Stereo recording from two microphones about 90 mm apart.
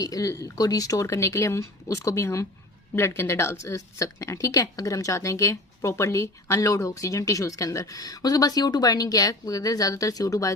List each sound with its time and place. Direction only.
0.0 s a woman's voice: 40° left (ahead or behind)